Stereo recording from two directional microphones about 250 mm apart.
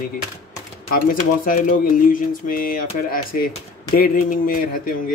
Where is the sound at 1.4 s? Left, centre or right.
Left.